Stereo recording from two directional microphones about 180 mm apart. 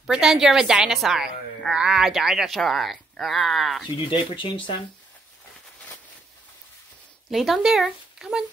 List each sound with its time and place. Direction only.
0.0 s a woman's voice: centre (ahead or behind)
3.8 s speech: 25° left (ahead or behind)
7.2 s a woman's voice: centre (ahead or behind)